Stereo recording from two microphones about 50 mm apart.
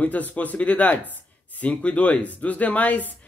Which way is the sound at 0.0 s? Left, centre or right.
Left.